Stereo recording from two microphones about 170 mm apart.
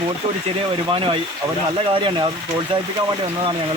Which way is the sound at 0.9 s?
30° right (ahead or behind).